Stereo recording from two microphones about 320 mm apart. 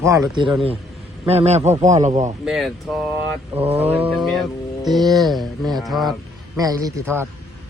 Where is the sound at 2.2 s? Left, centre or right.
Centre.